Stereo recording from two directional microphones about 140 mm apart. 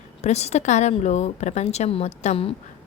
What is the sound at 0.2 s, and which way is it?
A woman's voice, 50° left (ahead or behind).